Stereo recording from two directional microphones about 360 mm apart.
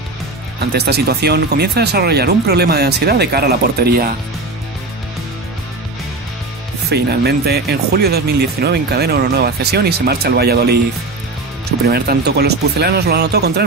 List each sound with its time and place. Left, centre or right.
0.7 s speech: right
6.9 s speech: right
11.8 s speech: right